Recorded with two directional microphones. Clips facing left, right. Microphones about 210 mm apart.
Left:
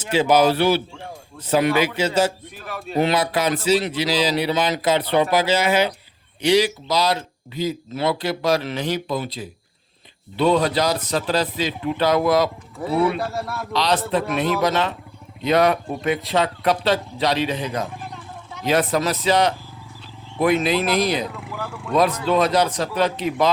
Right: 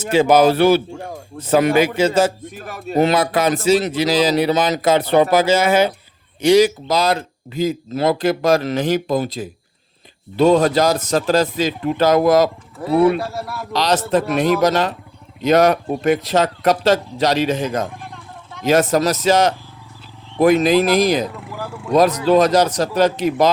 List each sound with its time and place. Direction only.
0.0 s speech: 50° right (ahead or behind)
13.1 s speech: centre (ahead or behind)
13.7 s speech: 45° right (ahead or behind)
18.0 s a sound: centre (ahead or behind)
18.6 s speech: 45° right (ahead or behind)
21.2 s speech: centre (ahead or behind)
22.3 s speech: 40° right (ahead or behind)